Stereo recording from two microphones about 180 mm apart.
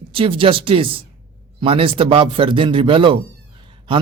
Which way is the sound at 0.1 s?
30° right (ahead or behind).